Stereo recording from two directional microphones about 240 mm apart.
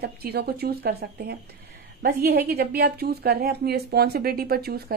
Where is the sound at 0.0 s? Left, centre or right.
Right.